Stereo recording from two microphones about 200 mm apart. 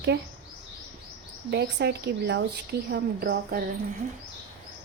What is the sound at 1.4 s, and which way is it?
A woman's voice, 55° right (ahead or behind).